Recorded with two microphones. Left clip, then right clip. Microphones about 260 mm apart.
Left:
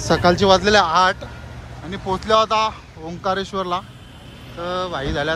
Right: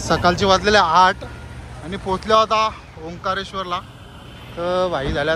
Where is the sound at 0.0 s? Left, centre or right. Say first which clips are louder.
Left 1 dB; centre.